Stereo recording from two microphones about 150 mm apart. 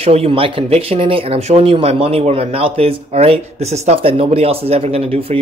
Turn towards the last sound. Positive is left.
turn(degrees=-40)  # may be behind; listen again after turning